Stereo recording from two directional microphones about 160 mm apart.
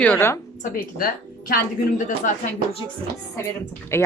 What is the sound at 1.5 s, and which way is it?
Speech, 50° left (ahead or behind).